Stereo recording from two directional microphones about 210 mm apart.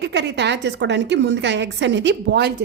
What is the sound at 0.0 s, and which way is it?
A woman's voice, 55° right (ahead or behind).